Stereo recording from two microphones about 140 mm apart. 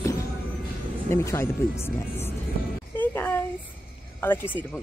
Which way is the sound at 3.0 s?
15° left (ahead or behind).